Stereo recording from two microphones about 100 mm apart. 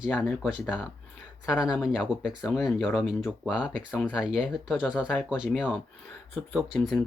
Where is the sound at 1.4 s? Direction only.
10° right (ahead or behind).